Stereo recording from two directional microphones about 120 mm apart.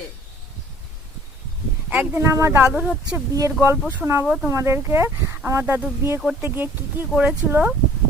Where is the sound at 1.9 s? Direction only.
15° right (ahead or behind).